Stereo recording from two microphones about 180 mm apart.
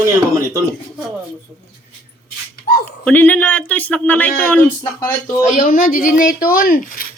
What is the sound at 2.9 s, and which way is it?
Speech, 10° left (ahead or behind).